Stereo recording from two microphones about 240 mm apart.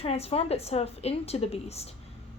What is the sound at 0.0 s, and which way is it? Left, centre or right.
A woman's voice, left.